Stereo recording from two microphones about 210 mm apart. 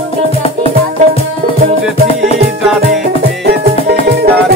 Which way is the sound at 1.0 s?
35° right (ahead or behind).